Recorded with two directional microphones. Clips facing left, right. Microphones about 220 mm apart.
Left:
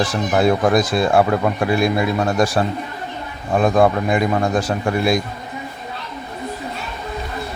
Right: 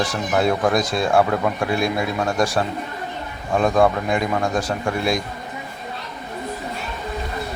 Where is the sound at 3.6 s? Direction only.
5° left (ahead or behind).